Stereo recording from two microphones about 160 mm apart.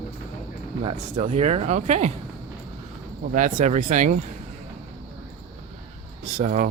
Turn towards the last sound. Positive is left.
turn(degrees=-50)  # may be behind; listen again after turning